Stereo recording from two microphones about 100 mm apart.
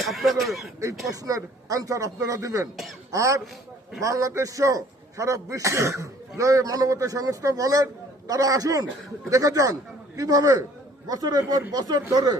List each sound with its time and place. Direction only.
0.0 s speech: centre (ahead or behind)
1.1 s a man's voice: 35° right (ahead or behind)